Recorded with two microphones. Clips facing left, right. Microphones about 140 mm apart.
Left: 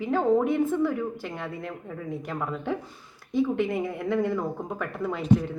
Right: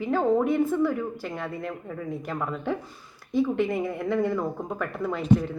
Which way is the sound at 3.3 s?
20° left (ahead or behind).